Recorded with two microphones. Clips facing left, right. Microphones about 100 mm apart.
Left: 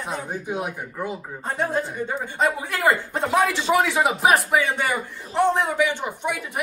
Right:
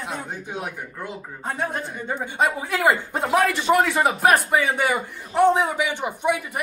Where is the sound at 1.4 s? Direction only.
10° right (ahead or behind).